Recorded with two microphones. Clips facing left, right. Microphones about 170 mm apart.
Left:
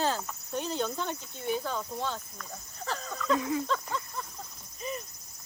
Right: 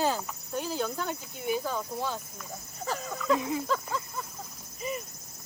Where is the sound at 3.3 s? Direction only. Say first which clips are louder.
Left 1 dB; 20° right (ahead or behind).